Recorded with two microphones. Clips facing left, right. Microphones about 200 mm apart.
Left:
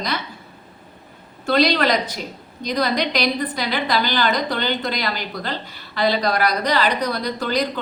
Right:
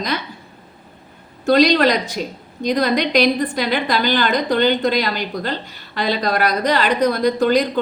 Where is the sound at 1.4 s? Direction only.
45° right (ahead or behind).